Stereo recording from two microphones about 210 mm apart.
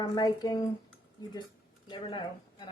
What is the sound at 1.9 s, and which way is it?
Speech, 20° left (ahead or behind).